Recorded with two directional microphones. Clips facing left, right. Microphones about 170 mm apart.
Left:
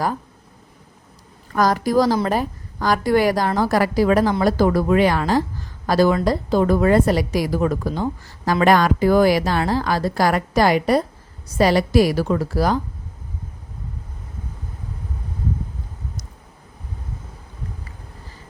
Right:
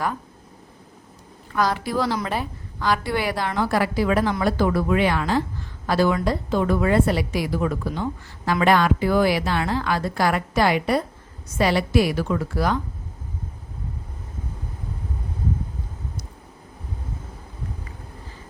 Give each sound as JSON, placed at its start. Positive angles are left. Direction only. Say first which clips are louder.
{"t": 1.5, "sound": "a woman's voice", "louder": "left 6 dB", "side_deg": 45}